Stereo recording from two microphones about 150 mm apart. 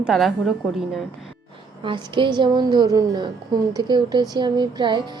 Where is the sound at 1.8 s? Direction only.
35° right (ahead or behind).